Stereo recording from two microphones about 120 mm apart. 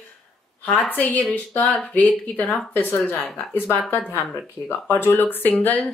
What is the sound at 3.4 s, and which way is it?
A woman's voice, 15° left (ahead or behind).